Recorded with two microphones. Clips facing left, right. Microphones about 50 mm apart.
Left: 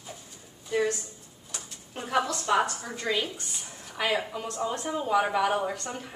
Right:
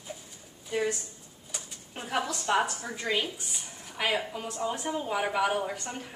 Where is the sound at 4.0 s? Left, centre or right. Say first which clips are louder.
Left 1 dB; centre.